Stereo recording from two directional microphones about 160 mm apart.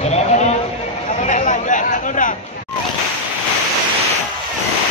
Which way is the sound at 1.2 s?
55° left (ahead or behind).